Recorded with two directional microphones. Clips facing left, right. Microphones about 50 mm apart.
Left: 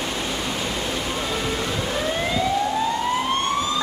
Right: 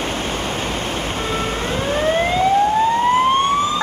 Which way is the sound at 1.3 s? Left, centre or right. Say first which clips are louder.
Right 3 dB; right.